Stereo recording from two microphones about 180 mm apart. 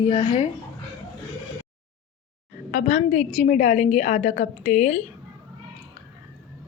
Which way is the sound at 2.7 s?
40° left (ahead or behind).